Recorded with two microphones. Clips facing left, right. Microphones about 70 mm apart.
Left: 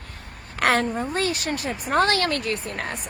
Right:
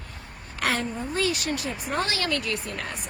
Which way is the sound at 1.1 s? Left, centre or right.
Left.